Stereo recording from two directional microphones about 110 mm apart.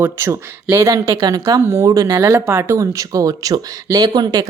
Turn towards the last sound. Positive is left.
turn(degrees=-35)  # may be behind; listen again after turning